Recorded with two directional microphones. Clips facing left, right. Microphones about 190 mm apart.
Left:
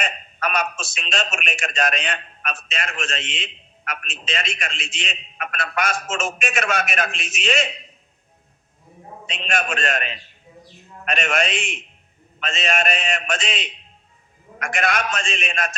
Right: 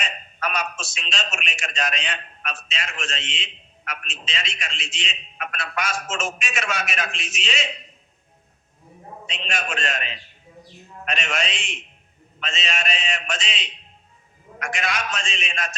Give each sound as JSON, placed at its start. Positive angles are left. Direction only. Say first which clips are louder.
{"t": 0.0, "sound": "a man's voice", "louder": "left 3 dB", "side_deg": 55}
{"t": 9.2, "sound": "a man's voice", "louder": "left 5 dB", "side_deg": 55}